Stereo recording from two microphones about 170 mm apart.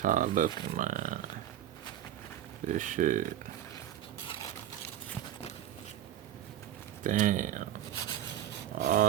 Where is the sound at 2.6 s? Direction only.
50° right (ahead or behind).